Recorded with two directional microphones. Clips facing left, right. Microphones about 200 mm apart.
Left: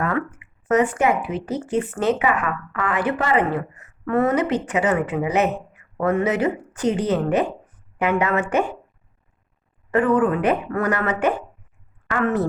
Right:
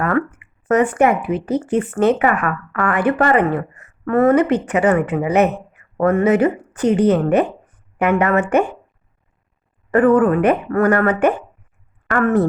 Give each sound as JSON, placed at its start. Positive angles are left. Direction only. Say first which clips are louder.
{"t": 0.0, "sound": "speech", "louder": "right 5 dB", "side_deg": -60}
{"t": 9.9, "sound": "a woman's voice", "louder": "right 5 dB", "side_deg": -50}